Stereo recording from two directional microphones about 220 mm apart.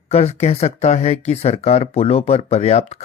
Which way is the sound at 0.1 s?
30° left (ahead or behind).